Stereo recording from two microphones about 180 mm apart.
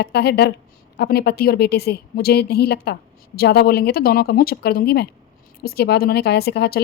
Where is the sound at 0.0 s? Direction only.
65° left (ahead or behind).